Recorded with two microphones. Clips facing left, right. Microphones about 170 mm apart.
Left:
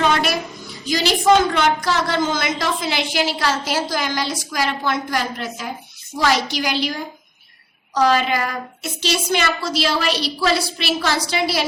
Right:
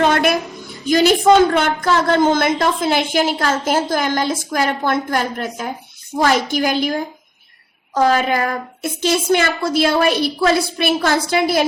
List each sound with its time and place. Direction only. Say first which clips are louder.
0.0 s a woman's voice: right 4 dB; 50° right (ahead or behind)